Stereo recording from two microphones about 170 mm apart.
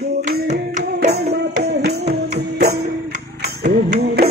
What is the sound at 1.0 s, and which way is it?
Music, 70° right (ahead or behind).